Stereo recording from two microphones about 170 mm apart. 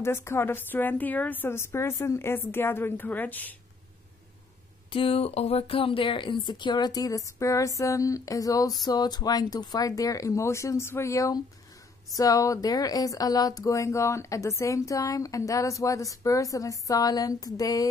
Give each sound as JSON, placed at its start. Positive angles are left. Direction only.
{"t": 0.0, "sound": "a woman's voice", "side_deg": 15}
{"t": 4.9, "sound": "speech", "side_deg": 35}